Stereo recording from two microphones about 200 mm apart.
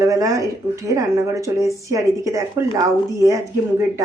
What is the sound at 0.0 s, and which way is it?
Speech, 15° right (ahead or behind).